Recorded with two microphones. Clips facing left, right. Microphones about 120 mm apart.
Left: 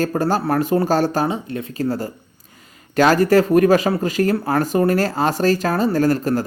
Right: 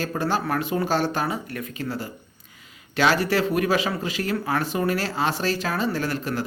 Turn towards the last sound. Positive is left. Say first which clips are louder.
# left 9 dB
turn(degrees=40)  # may be behind; listen again after turning